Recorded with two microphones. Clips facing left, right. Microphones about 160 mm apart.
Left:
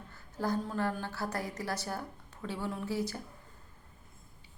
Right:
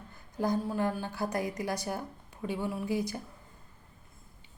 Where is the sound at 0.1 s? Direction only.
15° right (ahead or behind).